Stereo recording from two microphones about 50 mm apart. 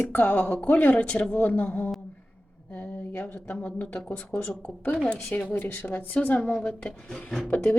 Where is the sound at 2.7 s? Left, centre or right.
Left.